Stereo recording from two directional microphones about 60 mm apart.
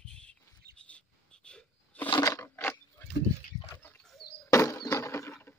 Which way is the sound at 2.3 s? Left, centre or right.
Left.